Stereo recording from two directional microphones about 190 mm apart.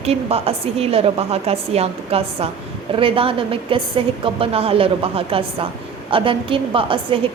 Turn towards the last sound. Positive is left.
turn(degrees=-25)  # may be behind; listen again after turning